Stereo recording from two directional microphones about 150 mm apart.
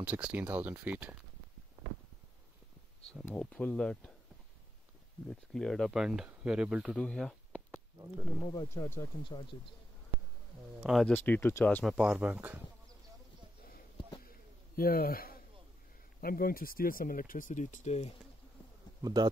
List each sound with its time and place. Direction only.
0.0 s speech: 10° right (ahead or behind)
3.3 s speech: 5° left (ahead or behind)
5.3 s speech: 5° left (ahead or behind)
8.5 s speech: 20° left (ahead or behind)
9.2 s speech: 35° left (ahead or behind)
10.8 s speech: centre (ahead or behind)
11.1 s speech: 15° left (ahead or behind)
11.8 s speech: 5° right (ahead or behind)
14.8 s a man's voice: 80° left; by 18.1 s 45° left (ahead or behind)
19.0 s a man's voice: 30° right (ahead or behind)